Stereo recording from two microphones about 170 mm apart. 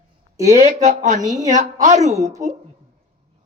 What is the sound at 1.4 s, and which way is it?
Speech, 45° right (ahead or behind).